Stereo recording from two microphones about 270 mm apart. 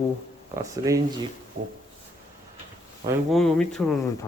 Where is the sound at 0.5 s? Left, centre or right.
Centre.